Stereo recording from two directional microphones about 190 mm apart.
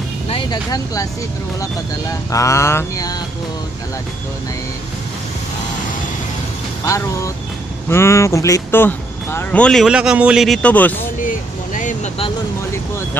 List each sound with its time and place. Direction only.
0.3 s speech: 20° left (ahead or behind)
2.3 s speech: 15° left (ahead or behind)
7.9 s speech: 15° left (ahead or behind)
11.2 s vehicle: 40° left (ahead or behind)